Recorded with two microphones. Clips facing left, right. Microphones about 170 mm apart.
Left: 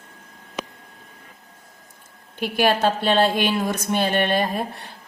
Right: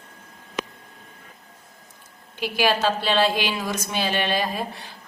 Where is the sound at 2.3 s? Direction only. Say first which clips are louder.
Left 2 dB; 55° left (ahead or behind).